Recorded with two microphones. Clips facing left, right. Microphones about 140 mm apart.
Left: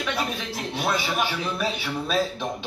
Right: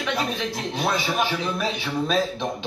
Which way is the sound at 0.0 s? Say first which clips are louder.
Right 2 dB; 10° left (ahead or behind).